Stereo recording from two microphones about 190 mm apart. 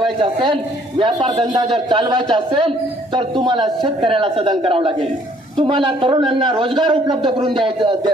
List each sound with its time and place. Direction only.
0.2 s a man's voice: 25° right (ahead or behind)